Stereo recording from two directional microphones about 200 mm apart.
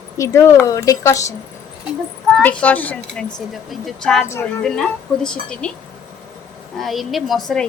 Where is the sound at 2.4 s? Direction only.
10° left (ahead or behind).